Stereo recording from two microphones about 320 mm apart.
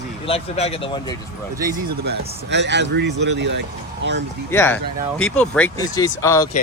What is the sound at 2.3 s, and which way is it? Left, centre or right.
Speech, right.